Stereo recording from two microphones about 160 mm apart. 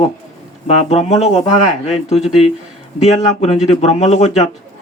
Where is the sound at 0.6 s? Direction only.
40° left (ahead or behind).